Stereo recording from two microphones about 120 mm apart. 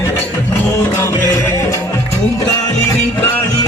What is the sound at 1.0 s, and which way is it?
Music, 20° left (ahead or behind).